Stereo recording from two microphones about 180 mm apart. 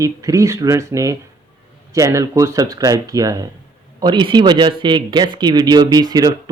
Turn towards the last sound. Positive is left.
turn(degrees=-20)  # may be behind; listen again after turning